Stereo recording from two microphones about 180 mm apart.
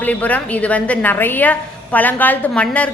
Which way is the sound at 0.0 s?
10° left (ahead or behind).